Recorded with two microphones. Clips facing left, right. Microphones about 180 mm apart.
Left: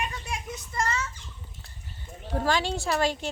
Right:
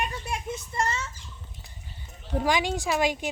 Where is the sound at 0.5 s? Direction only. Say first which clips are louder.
Left 2 dB; 25° right (ahead or behind).